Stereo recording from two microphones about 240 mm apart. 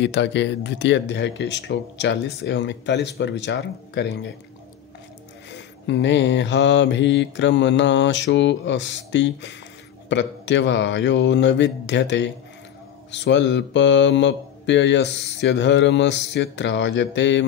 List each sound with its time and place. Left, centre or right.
0.0 s speech: left
5.5 s speech: left